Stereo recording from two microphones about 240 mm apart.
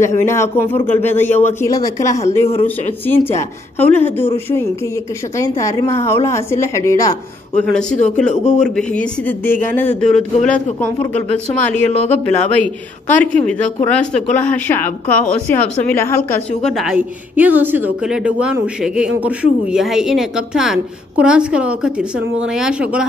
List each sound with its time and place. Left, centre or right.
0.0 s a woman's voice: centre
2.2 s speech: left
2.6 s a woman's voice: centre
5.4 s a woman's voice: centre
13.1 s speech: centre